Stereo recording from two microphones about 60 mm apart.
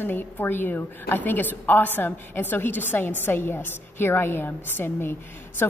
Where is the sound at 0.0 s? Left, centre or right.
Left.